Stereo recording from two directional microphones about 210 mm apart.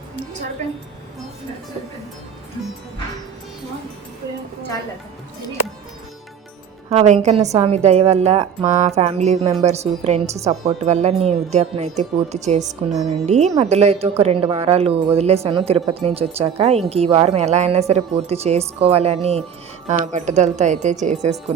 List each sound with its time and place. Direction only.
6.9 s a woman's voice: 35° right (ahead or behind)